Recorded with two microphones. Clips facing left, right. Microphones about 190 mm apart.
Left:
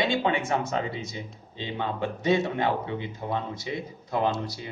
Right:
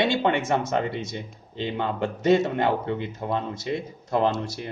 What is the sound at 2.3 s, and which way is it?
Speech, 50° right (ahead or behind).